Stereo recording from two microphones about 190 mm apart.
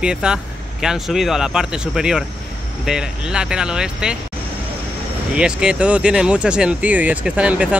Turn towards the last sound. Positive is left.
turn(degrees=-5)  # may be behind; listen again after turning